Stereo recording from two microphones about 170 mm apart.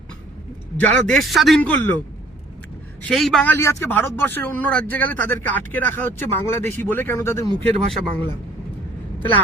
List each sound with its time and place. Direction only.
0.9 s speech: 5° left (ahead or behind)
3.0 s speech: centre (ahead or behind); by 7.5 s 15° left (ahead or behind)
7.6 s speech: 35° right (ahead or behind)